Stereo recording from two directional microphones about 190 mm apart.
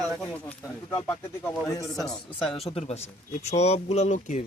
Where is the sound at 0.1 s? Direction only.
5° left (ahead or behind).